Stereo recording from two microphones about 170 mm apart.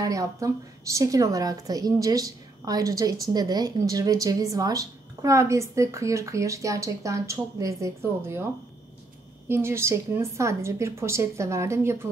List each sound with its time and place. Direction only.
0.0 s a woman's voice: 20° right (ahead or behind)
9.5 s a woman's voice: 15° right (ahead or behind)